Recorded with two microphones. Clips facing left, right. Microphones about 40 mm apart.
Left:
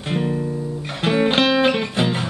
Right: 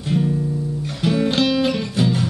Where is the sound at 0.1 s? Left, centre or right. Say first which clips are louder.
Right 2 dB; left.